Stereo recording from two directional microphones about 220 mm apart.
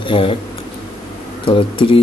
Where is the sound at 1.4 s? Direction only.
25° left (ahead or behind).